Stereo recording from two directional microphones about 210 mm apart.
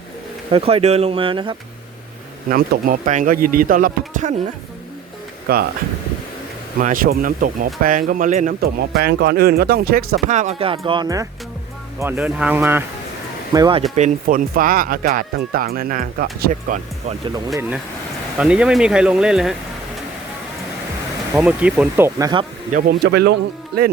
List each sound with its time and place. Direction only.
0.5 s speech: 30° right (ahead or behind)
2.5 s speech: 45° right (ahead or behind)
5.5 s speech: 45° right (ahead or behind)
6.7 s speech: 40° right (ahead or behind); by 12.8 s 10° right (ahead or behind)
13.5 s speech: 20° right (ahead or behind)
13.9 s speech: 40° right (ahead or behind)
18.3 s speech: 5° right (ahead or behind)
21.3 s speech: 5° right (ahead or behind)
22.7 s speech: 45° right (ahead or behind)